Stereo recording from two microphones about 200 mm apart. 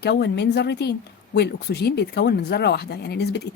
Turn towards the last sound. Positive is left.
turn(degrees=55)  # may be behind; listen again after turning